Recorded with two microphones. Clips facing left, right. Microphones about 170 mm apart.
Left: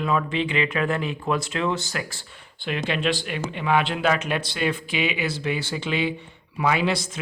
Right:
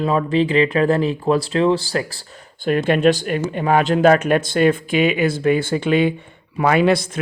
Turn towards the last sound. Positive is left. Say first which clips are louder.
# right 7 dB
turn(degrees=-55)  # may be behind; listen again after turning